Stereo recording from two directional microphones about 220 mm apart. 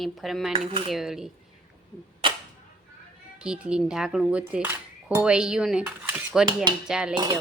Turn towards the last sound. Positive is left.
turn(degrees=-5)  # may be behind; listen again after turning